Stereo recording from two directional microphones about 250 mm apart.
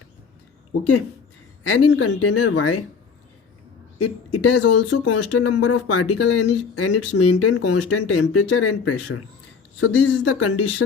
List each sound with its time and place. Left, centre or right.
1.6 s speech: left
3.9 s speech: left